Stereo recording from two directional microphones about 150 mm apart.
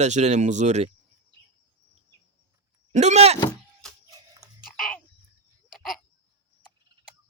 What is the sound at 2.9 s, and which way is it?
Speech, 50° right (ahead or behind).